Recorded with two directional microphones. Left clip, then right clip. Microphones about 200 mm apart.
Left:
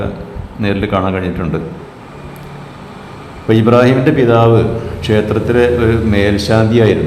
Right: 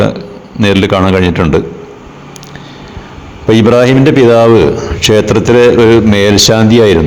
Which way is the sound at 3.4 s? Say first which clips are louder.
Right 3 dB; 40° right (ahead or behind).